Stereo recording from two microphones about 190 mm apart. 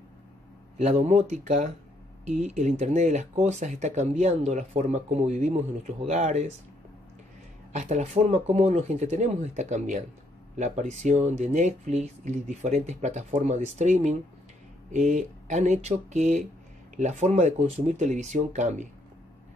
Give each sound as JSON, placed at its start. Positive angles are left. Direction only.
{"t": 0.7, "sound": "speech", "side_deg": -35}
{"t": 7.7, "sound": "speech", "side_deg": -40}